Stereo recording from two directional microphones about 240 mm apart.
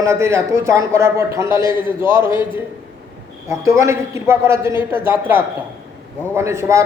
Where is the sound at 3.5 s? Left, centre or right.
Centre.